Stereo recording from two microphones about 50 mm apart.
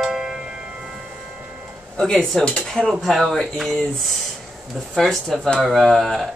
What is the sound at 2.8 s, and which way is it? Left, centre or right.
Speech, centre.